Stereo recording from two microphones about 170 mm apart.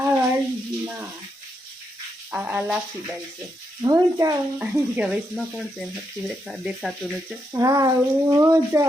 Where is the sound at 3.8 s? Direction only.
20° right (ahead or behind); by 6.9 s centre (ahead or behind).